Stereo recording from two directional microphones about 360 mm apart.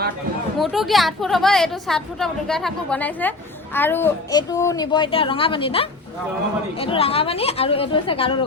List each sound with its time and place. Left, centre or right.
0.6 s a woman's voice: centre